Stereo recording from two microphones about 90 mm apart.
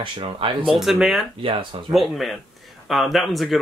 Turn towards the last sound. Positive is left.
turn(degrees=0)  # may be behind; listen again after turning